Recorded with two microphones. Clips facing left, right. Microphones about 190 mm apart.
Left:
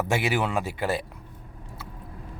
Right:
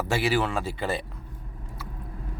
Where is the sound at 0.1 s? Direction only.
20° left (ahead or behind).